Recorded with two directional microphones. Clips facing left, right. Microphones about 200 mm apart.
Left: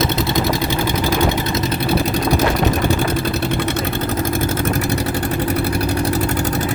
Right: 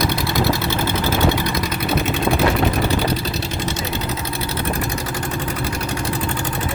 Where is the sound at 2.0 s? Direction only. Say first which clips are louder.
Left 2 dB; 40° left (ahead or behind).